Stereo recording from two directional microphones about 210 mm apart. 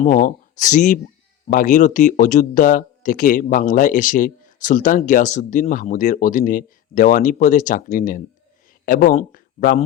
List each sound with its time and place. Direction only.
0.0 s speech: 40° left (ahead or behind)